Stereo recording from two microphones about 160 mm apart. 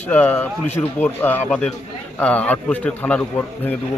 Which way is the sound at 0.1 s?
10° left (ahead or behind).